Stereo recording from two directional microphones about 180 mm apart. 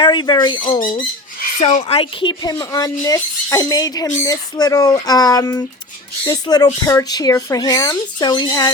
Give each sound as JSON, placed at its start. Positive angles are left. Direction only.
{"t": 0.0, "sound": "speech", "side_deg": 25}